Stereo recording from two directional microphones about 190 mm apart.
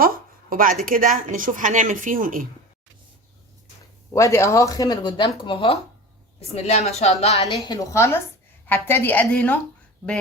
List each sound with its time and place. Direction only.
0.0 s speech: 50° right (ahead or behind)
4.1 s a woman's voice: 15° left (ahead or behind); by 7.4 s 35° left (ahead or behind)
7.6 s speech: 20° left (ahead or behind)